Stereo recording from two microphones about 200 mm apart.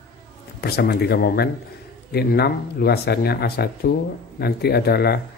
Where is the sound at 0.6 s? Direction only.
55° left (ahead or behind).